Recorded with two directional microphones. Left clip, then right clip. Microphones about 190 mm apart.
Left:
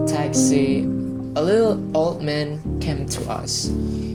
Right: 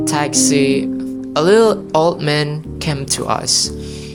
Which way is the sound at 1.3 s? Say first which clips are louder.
Right 7 dB; 50° right (ahead or behind).